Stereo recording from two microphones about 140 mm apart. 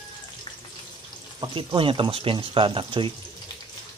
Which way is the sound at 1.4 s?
35° right (ahead or behind).